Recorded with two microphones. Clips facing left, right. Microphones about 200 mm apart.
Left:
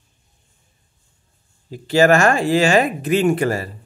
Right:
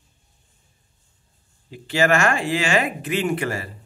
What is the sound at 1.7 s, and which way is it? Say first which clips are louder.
Speech: left 6 dB; 40° left (ahead or behind).